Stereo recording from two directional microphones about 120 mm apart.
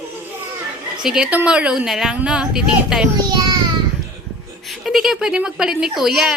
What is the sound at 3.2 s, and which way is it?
Speech, 35° right (ahead or behind).